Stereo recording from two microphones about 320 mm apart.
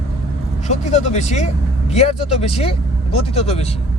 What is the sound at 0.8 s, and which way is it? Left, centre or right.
Speech, left.